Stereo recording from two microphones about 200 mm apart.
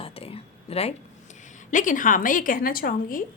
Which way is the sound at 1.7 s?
40° left (ahead or behind).